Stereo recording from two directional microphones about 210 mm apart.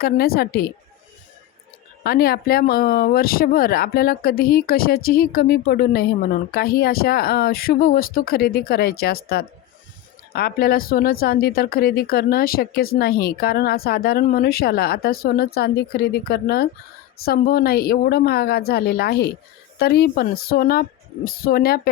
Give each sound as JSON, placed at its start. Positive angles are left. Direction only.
{"t": 0.0, "sound": "a woman's voice", "side_deg": 45}
{"t": 2.0, "sound": "a woman's voice", "side_deg": 45}